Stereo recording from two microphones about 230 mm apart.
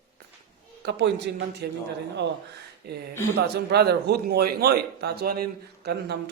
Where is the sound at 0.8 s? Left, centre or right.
Right.